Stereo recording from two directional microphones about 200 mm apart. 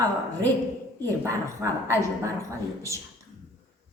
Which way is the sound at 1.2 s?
15° right (ahead or behind).